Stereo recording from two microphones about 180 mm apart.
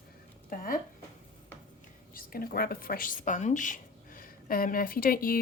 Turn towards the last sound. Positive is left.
turn(degrees=50)  # may be behind; listen again after turning